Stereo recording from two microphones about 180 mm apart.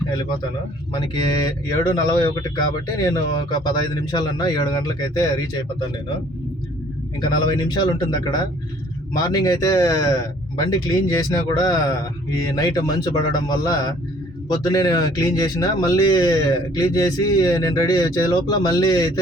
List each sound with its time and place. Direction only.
0.9 s speech: 25° left (ahead or behind)
7.2 s speech: 25° left (ahead or behind)